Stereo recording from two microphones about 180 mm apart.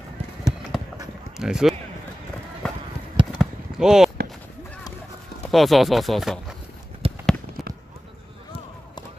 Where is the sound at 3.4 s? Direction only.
5° right (ahead or behind).